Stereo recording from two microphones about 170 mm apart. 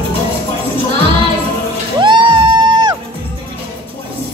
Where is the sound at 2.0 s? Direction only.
25° right (ahead or behind).